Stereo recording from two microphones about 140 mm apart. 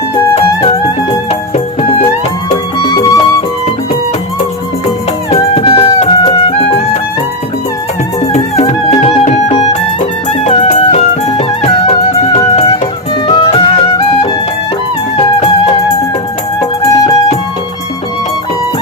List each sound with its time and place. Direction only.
1.3 s music: 40° left (ahead or behind)
2.7 s music: 30° left (ahead or behind)
5.3 s music: 45° left (ahead or behind)
8.2 s music: 50° left (ahead or behind)
10.0 s music: 60° left (ahead or behind); by 14.3 s 40° left (ahead or behind)
15.4 s music: 45° left (ahead or behind)
16.6 s music: 30° left (ahead or behind)